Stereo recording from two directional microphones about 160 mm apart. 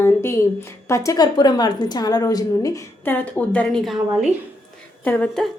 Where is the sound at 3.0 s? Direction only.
10° left (ahead or behind).